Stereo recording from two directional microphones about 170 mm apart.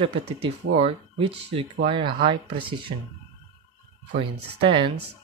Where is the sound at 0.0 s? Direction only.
35° right (ahead or behind).